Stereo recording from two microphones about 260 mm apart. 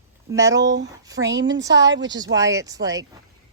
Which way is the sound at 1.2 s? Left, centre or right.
Right.